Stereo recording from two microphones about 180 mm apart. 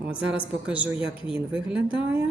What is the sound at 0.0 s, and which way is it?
A woman's voice, 5° right (ahead or behind).